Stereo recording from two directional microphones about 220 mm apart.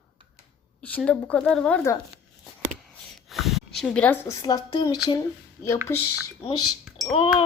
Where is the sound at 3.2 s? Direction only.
Centre (ahead or behind).